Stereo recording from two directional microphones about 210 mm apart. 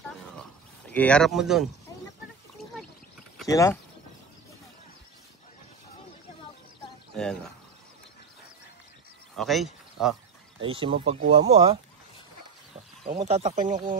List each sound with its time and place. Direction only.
0.4 s a sound: 5° left (ahead or behind)
3.4 s speech: 15° left (ahead or behind)
7.2 s speech: 5° left (ahead or behind)
9.4 s speech: centre (ahead or behind)
10.6 s speech: 25° right (ahead or behind)
13.0 s speech: 30° right (ahead or behind)